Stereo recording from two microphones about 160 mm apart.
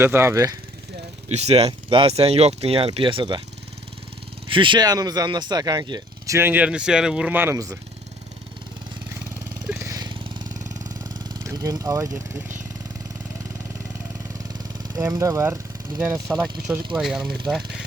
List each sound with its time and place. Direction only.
0.0 s speech: 15° right (ahead or behind)
1.3 s speech: 40° right (ahead or behind)
4.4 s speech: 30° right (ahead or behind)
9.6 s jackhammer: 20° right (ahead or behind)
11.4 s speech: 20° right (ahead or behind)
14.6 s speech: 25° right (ahead or behind)
16.6 s speech: 5° right (ahead or behind)